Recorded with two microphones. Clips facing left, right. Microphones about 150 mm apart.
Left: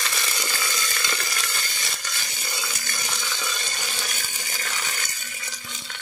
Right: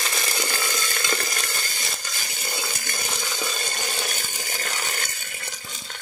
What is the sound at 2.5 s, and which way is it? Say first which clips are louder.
Water: right 3 dB; 45° right (ahead or behind).